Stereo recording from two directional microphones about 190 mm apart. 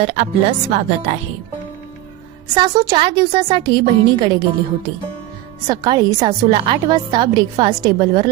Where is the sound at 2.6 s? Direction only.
20° right (ahead or behind).